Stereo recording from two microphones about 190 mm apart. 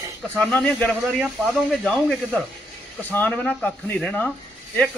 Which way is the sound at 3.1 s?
10° left (ahead or behind).